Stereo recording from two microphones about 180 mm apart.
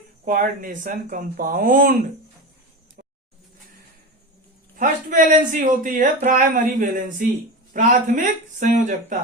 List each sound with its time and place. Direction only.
0.3 s a man's voice: 45° right (ahead or behind)
4.8 s a man's voice: 45° right (ahead or behind)